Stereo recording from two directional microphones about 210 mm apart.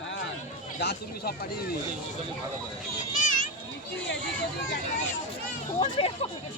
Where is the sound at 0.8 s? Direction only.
50° left (ahead or behind).